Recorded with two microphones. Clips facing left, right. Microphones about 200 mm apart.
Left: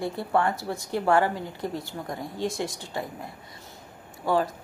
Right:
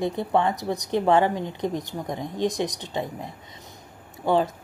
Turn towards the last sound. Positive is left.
turn(degrees=-25)  # may be behind; listen again after turning